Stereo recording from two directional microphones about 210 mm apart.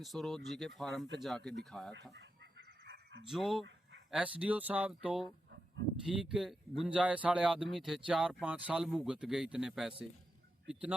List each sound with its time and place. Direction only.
0.0 s speech: centre (ahead or behind)
2.8 s dog: 60° right (ahead or behind)
3.2 s speech: centre (ahead or behind)